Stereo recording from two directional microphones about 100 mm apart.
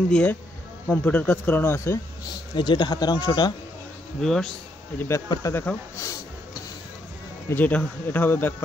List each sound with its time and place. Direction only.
0.1 s speech: 10° left (ahead or behind)
2.5 s speech: 50° left (ahead or behind)
4.2 s speech: 5° left (ahead or behind)
4.9 s speech: 25° left (ahead or behind)
7.4 s speech: 20° left (ahead or behind)